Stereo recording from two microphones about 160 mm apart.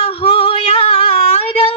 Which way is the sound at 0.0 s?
35° left (ahead or behind).